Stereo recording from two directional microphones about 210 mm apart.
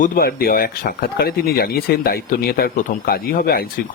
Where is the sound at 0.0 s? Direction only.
45° left (ahead or behind).